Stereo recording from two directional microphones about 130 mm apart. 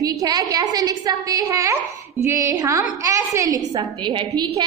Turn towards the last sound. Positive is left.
turn(degrees=-35)  # may be behind; listen again after turning